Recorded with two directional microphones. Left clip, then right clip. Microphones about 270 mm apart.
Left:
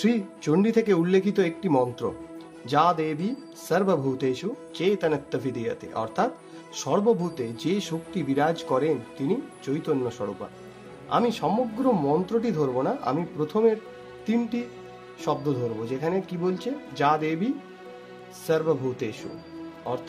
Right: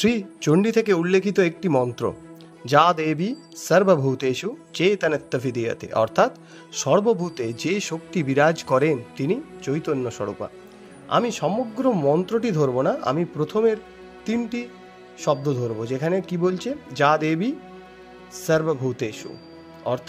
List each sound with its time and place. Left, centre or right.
0.0 s speech: right
18.5 s speech: right